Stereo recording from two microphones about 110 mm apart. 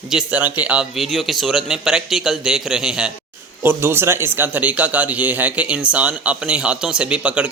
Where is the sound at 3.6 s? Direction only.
20° right (ahead or behind).